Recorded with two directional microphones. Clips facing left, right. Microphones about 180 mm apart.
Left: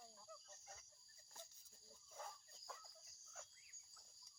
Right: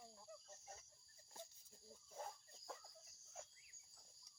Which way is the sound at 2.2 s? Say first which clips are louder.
Right 3 dB; 30° right (ahead or behind).